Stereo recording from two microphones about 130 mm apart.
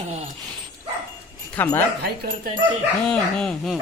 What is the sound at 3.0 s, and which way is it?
Speech, 5° left (ahead or behind).